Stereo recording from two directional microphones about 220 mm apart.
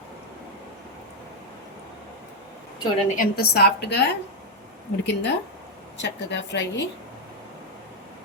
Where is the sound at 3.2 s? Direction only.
45° left (ahead or behind).